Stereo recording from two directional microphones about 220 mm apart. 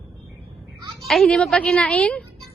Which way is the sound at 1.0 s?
Centre (ahead or behind).